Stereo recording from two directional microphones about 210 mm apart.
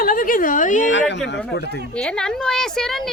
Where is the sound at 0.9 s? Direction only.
55° left (ahead or behind).